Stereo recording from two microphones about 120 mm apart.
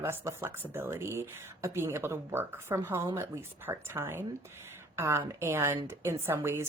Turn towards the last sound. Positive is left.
turn(degrees=-20)  # may be behind; listen again after turning